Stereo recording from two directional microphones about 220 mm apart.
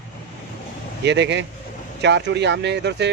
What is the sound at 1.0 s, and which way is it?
Speech, 55° right (ahead or behind).